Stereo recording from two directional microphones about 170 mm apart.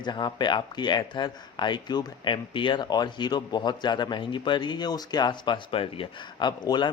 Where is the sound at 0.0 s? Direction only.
25° left (ahead or behind).